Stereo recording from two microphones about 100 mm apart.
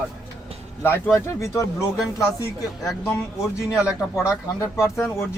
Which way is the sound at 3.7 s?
30° left (ahead or behind).